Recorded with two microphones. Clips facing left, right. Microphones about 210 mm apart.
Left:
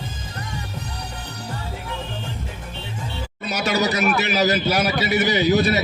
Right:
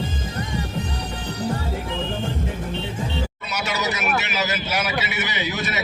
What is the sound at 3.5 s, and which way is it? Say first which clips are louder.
A man's voice: left 6 dB; 35° left (ahead or behind).